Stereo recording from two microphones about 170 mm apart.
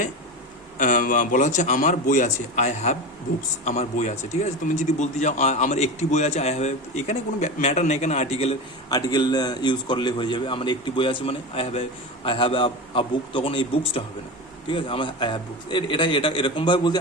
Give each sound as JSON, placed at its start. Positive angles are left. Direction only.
{"t": 0.8, "sound": "a man's voice", "side_deg": 50}
{"t": 8.9, "sound": "a man's voice", "side_deg": 20}